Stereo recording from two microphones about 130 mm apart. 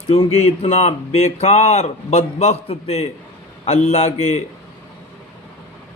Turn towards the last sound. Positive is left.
turn(degrees=50)  # may be behind; listen again after turning